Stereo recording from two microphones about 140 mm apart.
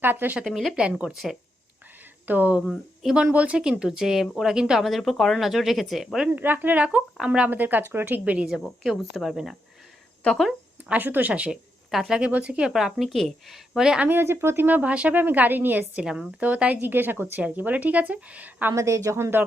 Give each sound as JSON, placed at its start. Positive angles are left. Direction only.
{"t": 0.0, "sound": "speech", "side_deg": -15}
{"t": 0.4, "sound": "a woman's voice", "side_deg": 0}
{"t": 2.2, "sound": "a woman's voice", "side_deg": -10}
{"t": 10.9, "sound": "speech", "side_deg": -10}
{"t": 18.7, "sound": "a woman's voice", "side_deg": -20}